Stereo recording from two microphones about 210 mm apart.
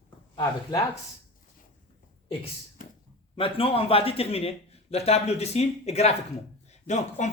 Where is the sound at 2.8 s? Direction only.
40° left (ahead or behind).